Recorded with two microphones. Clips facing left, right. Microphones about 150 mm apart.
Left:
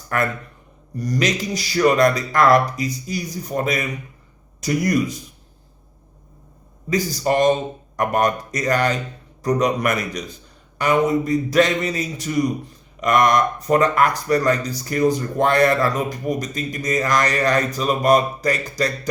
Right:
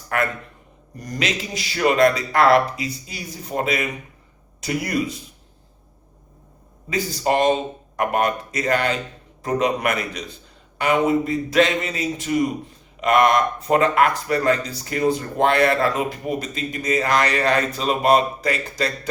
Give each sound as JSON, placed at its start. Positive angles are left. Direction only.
{"t": 0.9, "sound": "speech", "side_deg": 35}
{"t": 6.9, "sound": "speech", "side_deg": 40}